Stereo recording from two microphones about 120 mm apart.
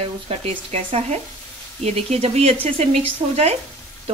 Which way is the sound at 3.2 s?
45° right (ahead or behind).